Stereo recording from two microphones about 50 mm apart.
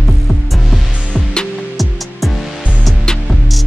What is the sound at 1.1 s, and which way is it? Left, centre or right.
Music, centre.